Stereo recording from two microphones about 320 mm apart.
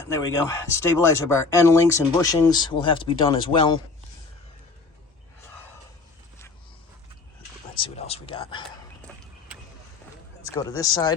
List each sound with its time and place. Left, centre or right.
0.1 s speech: centre
7.8 s speech: centre
9.0 s a sound: centre
10.4 s speech: centre